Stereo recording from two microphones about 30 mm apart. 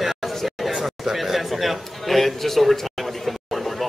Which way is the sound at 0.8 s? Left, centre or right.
Centre.